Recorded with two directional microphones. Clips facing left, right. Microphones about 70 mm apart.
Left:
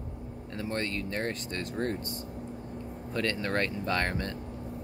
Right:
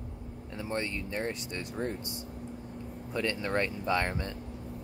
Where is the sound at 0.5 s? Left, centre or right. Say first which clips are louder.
Left 1 dB; centre.